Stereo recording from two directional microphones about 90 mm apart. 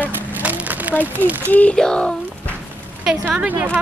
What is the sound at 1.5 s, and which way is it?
Speech, 15° left (ahead or behind).